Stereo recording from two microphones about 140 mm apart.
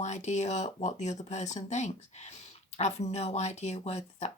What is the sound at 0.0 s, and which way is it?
Speech, 55° left (ahead or behind).